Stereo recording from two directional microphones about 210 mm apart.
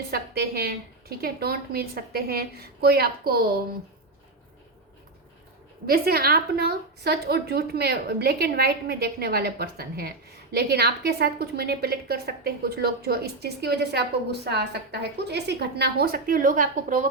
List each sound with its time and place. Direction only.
0.1 s a woman's voice: 45° right (ahead or behind)
5.8 s a woman's voice: 45° right (ahead or behind)